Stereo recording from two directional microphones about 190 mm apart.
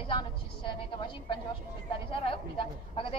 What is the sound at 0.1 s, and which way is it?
A woman's voice, 25° left (ahead or behind).